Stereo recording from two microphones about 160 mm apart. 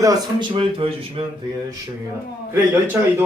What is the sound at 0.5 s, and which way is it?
Speech, 35° right (ahead or behind).